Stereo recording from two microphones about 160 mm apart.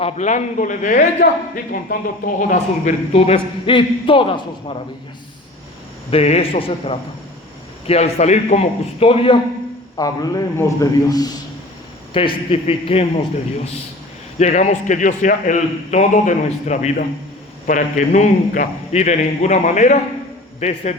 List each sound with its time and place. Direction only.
0.0 s a man's voice: 45° left (ahead or behind)
3.1 s a man's voice: 40° left (ahead or behind)
6.1 s a man's voice: 40° left (ahead or behind)
10.0 s a man's voice: 25° left (ahead or behind)
14.3 s a man's voice: 45° left (ahead or behind)